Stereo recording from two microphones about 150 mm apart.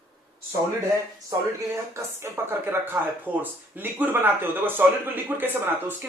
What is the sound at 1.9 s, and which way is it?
Speech, 20° right (ahead or behind).